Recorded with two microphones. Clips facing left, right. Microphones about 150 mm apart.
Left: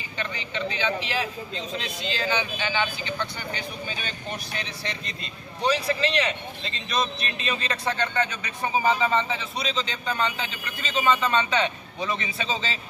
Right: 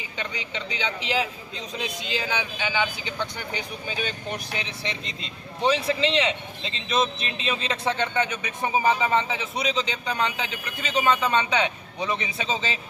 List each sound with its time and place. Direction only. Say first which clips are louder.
0.2 s a man's voice: left 3 dB; 15° right (ahead or behind)